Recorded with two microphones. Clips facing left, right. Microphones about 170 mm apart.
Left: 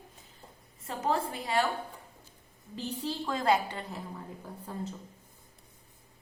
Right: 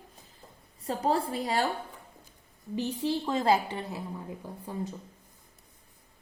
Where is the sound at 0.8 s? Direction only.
35° right (ahead or behind).